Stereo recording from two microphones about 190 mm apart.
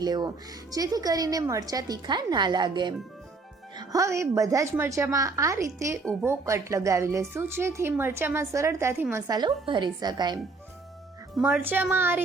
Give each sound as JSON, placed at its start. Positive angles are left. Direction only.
{"t": 0.0, "sound": "a woman's voice", "side_deg": -20}
{"t": 11.3, "sound": "a woman's voice", "side_deg": -5}